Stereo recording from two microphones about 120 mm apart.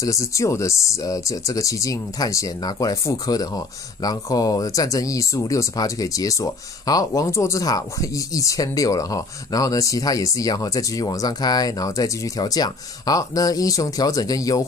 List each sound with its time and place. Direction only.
0.0 s speech: 25° left (ahead or behind)